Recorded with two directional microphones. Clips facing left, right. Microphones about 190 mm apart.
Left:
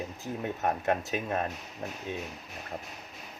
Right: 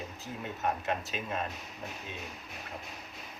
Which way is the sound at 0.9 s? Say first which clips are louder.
Left 5 dB; 55° left (ahead or behind).